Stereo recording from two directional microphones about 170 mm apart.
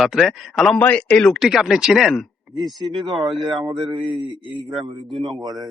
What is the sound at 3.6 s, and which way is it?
Speech, 30° right (ahead or behind).